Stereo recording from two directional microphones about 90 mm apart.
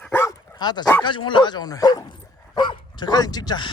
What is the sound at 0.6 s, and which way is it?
Speech, 50° left (ahead or behind).